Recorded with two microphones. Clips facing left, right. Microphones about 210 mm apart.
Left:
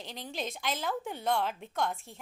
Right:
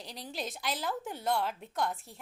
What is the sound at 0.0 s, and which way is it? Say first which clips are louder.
Speech: left 2 dB; 35° right (ahead or behind).